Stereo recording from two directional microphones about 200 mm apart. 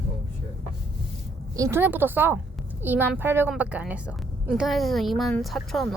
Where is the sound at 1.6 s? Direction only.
10° right (ahead or behind).